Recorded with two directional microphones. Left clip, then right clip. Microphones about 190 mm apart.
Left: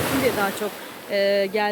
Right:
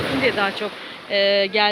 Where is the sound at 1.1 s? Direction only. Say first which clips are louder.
Right 3 dB; 20° left (ahead or behind).